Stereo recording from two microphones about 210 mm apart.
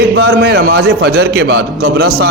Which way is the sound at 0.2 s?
60° right (ahead or behind).